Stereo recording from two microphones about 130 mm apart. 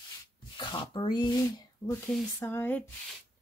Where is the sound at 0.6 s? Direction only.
35° left (ahead or behind).